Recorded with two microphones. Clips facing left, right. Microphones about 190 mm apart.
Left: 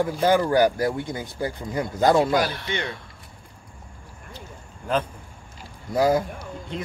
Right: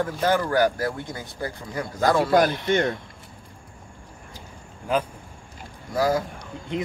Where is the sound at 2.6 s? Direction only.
50° right (ahead or behind).